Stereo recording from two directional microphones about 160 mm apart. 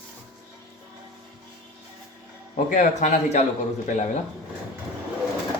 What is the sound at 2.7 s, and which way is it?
Speech, 50° left (ahead or behind).